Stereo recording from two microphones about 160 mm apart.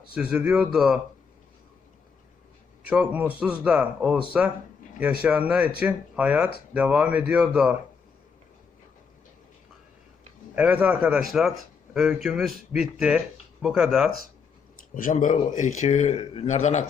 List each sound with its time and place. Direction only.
0.1 s speech: 5° right (ahead or behind)
2.8 s a man's voice: 5° right (ahead or behind)
10.5 s a man's voice: 10° right (ahead or behind)
14.9 s a man's voice: 55° left (ahead or behind)